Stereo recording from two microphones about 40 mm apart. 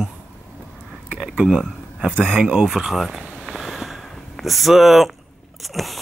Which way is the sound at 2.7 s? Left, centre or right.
Centre.